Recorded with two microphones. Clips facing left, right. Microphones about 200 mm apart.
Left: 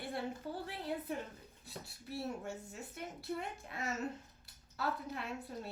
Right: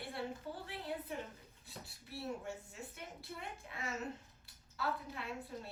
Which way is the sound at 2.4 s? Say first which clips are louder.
Left 2 dB; 40° left (ahead or behind).